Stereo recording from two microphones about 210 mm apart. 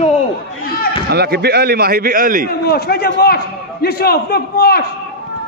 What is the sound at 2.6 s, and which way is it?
A man's voice, 50° left (ahead or behind).